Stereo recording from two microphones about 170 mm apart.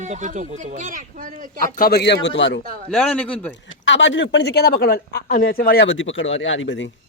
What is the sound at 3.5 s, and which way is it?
Speech, 90° left.